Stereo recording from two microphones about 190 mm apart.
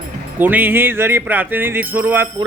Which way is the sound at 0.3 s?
10° right (ahead or behind).